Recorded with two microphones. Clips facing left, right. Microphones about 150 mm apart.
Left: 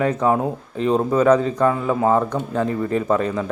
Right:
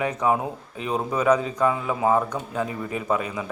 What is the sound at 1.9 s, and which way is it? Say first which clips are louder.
Speech: left 4 dB; 35° left (ahead or behind).